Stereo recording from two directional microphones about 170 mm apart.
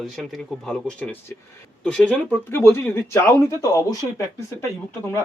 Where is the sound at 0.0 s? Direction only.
Centre (ahead or behind); by 4.0 s 20° left (ahead or behind).